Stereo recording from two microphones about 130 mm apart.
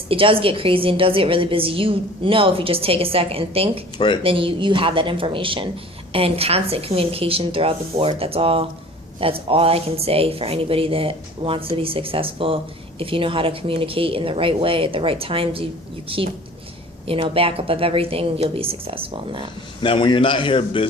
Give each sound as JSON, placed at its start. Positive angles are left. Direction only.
{"t": 0.1, "sound": "a woman's voice", "side_deg": -45}
{"t": 3.9, "sound": "a man's voice", "side_deg": 35}
{"t": 4.2, "sound": "a woman's voice", "side_deg": -45}
{"t": 19.8, "sound": "a man's voice", "side_deg": 40}